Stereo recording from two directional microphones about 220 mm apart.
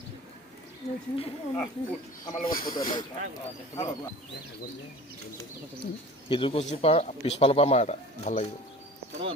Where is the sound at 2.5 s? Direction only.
40° left (ahead or behind).